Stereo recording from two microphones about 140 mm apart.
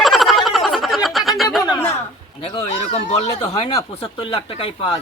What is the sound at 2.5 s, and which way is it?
Speech, 45° left (ahead or behind).